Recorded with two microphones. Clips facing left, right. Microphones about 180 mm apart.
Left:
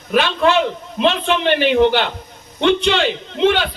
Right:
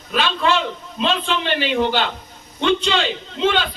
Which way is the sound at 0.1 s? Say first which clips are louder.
Left 4 dB; 55° left (ahead or behind).